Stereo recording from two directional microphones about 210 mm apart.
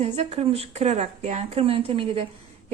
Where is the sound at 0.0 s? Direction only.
30° right (ahead or behind).